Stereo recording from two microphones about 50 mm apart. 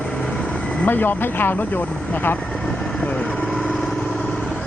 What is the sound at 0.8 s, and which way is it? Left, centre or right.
Speech, left.